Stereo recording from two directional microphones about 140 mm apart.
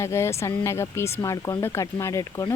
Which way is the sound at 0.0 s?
20° left (ahead or behind).